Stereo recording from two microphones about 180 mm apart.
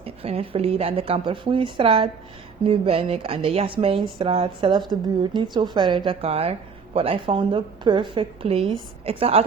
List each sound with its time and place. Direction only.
0.0 s a woman's voice: 30° right (ahead or behind)